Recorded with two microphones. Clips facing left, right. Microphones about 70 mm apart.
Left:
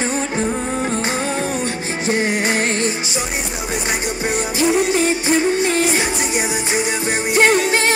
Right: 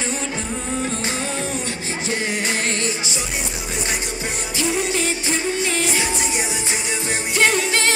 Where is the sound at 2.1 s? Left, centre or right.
Left.